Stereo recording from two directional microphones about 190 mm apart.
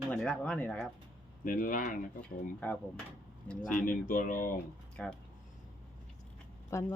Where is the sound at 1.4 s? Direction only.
45° left (ahead or behind).